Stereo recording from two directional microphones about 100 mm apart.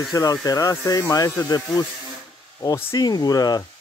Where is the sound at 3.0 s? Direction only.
40° left (ahead or behind).